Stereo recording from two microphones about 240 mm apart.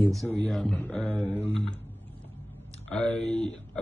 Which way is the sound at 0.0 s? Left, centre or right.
Centre.